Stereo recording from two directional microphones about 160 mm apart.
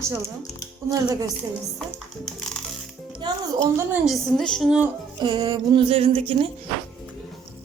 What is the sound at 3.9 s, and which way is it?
A woman's voice, centre (ahead or behind).